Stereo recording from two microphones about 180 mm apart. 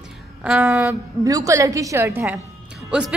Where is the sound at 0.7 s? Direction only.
15° right (ahead or behind).